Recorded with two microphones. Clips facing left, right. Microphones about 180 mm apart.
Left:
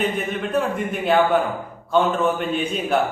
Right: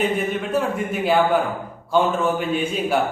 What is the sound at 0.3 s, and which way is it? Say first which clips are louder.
A man's voice: even; 5° right (ahead or behind).